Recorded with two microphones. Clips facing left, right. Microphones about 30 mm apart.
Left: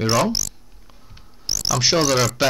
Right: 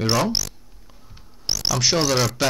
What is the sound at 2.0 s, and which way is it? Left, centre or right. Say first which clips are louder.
Speech: left 2 dB; centre.